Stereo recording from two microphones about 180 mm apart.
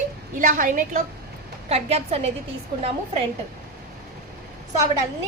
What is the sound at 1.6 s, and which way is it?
Speech, 35° right (ahead or behind).